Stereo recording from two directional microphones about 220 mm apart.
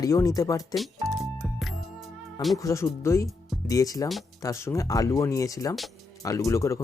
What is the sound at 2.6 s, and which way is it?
Speech, 15° left (ahead or behind).